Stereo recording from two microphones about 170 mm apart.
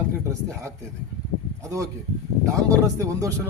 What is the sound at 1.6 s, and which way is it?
Speech, 20° right (ahead or behind).